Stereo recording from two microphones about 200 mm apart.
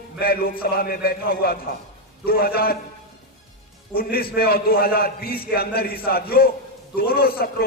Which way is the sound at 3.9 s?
50° left (ahead or behind).